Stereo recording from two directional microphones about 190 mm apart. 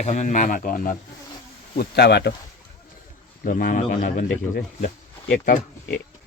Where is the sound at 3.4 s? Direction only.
45° left (ahead or behind).